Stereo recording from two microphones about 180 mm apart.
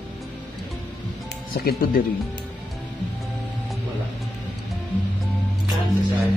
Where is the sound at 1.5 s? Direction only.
55° left (ahead or behind).